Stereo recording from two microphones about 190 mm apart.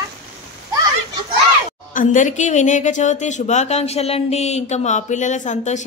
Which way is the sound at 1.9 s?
45° left (ahead or behind).